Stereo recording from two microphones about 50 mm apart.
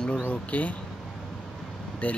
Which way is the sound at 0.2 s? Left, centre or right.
Left.